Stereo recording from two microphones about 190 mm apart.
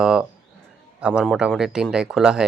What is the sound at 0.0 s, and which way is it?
Speech, 5° right (ahead or behind).